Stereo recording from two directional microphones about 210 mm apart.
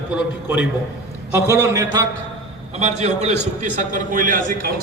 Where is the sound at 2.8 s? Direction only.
30° right (ahead or behind).